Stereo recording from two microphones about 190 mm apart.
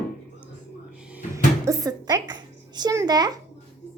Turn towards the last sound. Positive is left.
turn(degrees=-20)  # may be behind; listen again after turning